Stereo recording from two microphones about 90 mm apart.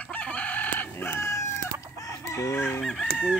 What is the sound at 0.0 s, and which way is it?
Chicken, 15° left (ahead or behind).